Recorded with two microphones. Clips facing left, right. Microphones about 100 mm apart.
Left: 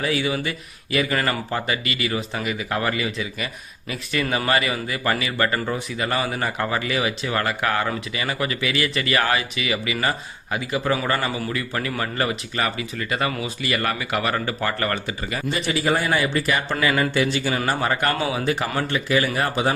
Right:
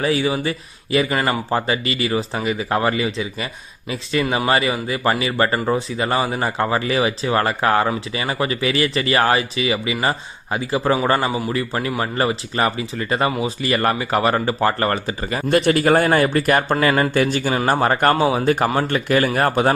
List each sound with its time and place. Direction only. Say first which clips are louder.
0.0 s speech: right 4 dB; 30° right (ahead or behind)
15.4 s a man's voice: right 8 dB; 60° right (ahead or behind)